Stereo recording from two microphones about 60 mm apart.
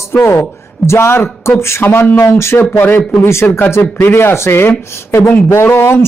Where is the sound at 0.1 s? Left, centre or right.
Left.